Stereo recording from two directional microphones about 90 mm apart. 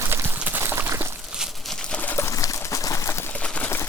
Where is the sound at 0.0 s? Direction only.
25° right (ahead or behind).